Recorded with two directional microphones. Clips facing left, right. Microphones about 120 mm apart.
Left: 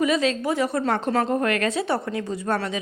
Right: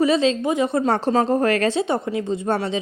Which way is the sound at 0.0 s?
30° right (ahead or behind).